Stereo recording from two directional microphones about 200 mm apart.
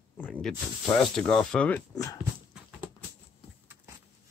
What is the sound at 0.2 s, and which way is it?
Speech, 5° left (ahead or behind).